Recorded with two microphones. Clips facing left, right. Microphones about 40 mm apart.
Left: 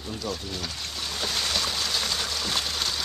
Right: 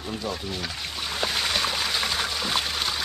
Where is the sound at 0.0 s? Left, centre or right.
Centre.